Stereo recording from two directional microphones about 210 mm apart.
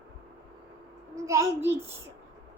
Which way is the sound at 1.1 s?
15° right (ahead or behind).